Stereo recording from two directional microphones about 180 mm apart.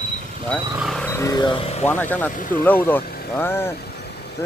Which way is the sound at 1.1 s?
15° left (ahead or behind).